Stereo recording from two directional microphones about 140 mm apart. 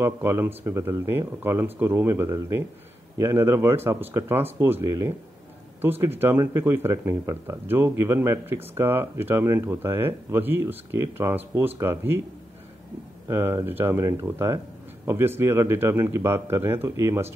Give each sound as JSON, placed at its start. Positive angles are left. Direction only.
{"t": 0.0, "sound": "speech", "side_deg": -15}
{"t": 13.3, "sound": "speech", "side_deg": -20}